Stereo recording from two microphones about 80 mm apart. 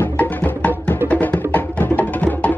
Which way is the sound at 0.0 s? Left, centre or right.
Centre.